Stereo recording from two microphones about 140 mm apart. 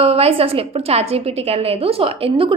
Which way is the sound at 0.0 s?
45° right (ahead or behind).